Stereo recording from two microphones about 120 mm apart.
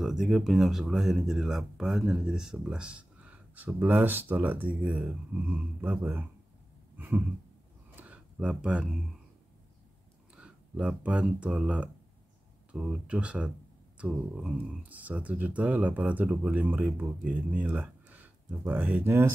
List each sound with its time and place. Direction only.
0.0 s speech: 5° right (ahead or behind)
7.0 s a sound: 15° right (ahead or behind)
10.3 s speech: 10° right (ahead or behind)